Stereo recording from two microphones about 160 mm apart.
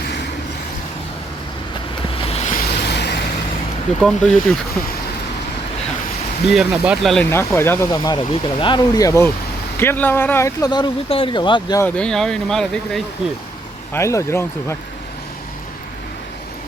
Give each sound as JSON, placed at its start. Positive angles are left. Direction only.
{"t": 2.2, "sound": "waves", "side_deg": 40}
{"t": 2.5, "sound": "vehicle", "side_deg": 80}
{"t": 4.0, "sound": "speech", "side_deg": 5}
{"t": 6.5, "sound": "speech", "side_deg": -5}
{"t": 7.3, "sound": "speech", "side_deg": 15}
{"t": 11.8, "sound": "speech", "side_deg": 5}
{"t": 13.9, "sound": "speech", "side_deg": 20}